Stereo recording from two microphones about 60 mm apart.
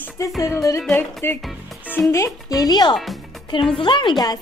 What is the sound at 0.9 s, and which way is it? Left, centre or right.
Music, left.